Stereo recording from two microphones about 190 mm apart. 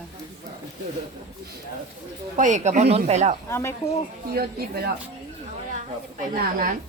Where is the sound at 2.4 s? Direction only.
40° right (ahead or behind).